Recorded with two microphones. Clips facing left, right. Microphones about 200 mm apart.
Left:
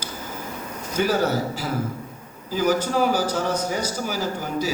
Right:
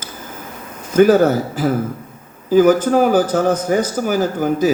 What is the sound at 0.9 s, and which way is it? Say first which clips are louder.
A man's voice: right 11 dB; 50° right (ahead or behind).